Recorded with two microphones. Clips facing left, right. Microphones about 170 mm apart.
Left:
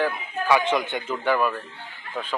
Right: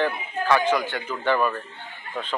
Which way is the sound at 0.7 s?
20° left (ahead or behind).